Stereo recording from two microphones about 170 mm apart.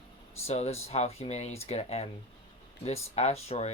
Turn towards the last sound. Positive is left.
turn(degrees=40)  # may be behind; listen again after turning